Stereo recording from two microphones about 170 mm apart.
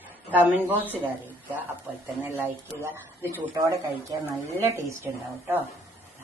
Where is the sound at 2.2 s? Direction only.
15° right (ahead or behind).